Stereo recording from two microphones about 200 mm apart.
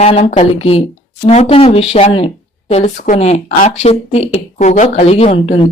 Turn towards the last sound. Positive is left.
turn(degrees=30)  # may be behind; listen again after turning